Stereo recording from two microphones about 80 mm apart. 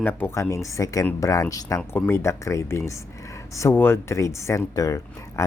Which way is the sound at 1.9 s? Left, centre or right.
Left.